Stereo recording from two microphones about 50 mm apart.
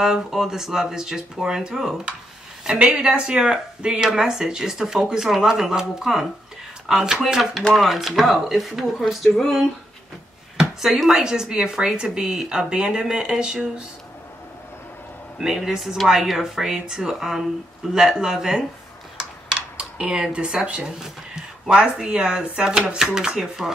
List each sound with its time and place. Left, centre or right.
0.0 s a woman's voice: centre
10.8 s speech: centre
15.3 s speech: centre
19.5 s a sound: centre
20.6 s speech: right